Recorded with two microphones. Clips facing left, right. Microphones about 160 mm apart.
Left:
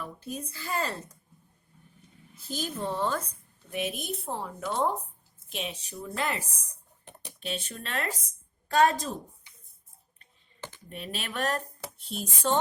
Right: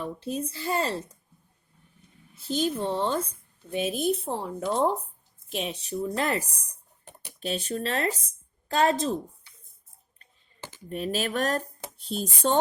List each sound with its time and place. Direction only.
0.0 s speech: 30° right (ahead or behind)
2.5 s speech: 25° right (ahead or behind)
10.8 s speech: 40° right (ahead or behind)